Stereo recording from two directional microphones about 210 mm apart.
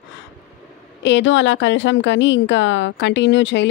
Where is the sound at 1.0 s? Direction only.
60° left (ahead or behind).